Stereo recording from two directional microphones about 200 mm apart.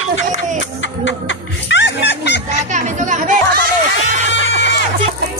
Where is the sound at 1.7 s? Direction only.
60° left (ahead or behind).